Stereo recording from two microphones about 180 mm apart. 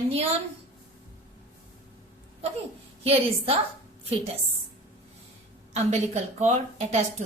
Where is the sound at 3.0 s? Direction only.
35° right (ahead or behind).